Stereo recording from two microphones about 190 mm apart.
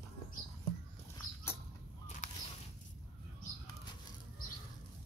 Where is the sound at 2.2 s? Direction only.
40° left (ahead or behind).